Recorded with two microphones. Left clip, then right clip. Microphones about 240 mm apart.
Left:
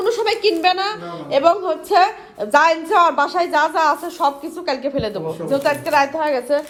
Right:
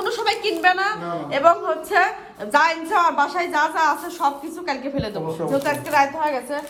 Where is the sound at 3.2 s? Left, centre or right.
Left.